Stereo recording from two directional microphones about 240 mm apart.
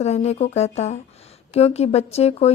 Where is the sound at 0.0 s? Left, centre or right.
Left.